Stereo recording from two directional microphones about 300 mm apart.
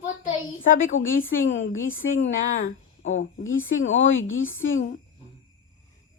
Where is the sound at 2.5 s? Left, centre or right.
Left.